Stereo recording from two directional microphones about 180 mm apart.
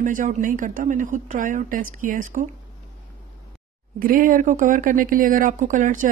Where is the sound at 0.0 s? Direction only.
45° right (ahead or behind).